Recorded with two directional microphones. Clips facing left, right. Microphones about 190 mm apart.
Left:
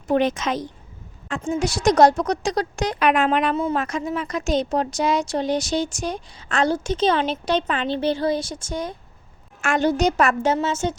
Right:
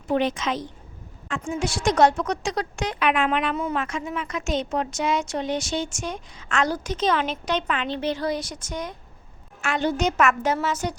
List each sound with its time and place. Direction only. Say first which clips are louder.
0.1 s a woman's voice: left 3 dB; 45° left (ahead or behind)
9.6 s a woman's voice: left 4 dB; 45° left (ahead or behind); by 10.9 s 25° left (ahead or behind)